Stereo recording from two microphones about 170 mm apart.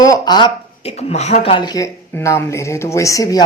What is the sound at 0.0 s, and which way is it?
Speech, 25° left (ahead or behind).